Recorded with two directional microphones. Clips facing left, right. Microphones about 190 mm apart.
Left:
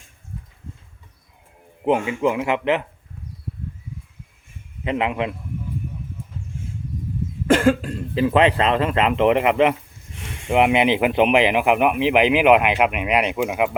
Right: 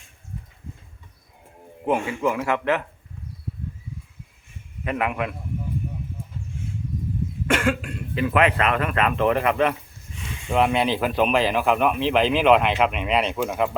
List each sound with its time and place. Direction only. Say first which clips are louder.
1.8 s speech: left 3 dB; 20° left (ahead or behind)
4.8 s speech: left 3 dB; 20° left (ahead or behind)
7.4 s speech: left 7 dB; 35° left (ahead or behind); by 13.7 s 10° left (ahead or behind)